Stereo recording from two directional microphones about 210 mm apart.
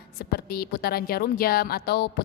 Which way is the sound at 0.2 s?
45° left (ahead or behind).